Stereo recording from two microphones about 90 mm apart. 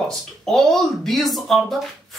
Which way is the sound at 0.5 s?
5° left (ahead or behind).